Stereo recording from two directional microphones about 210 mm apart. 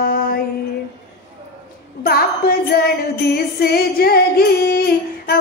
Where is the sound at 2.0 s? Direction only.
45° left (ahead or behind).